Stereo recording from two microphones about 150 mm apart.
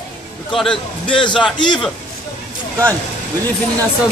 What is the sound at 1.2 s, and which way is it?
Speech, 35° left (ahead or behind).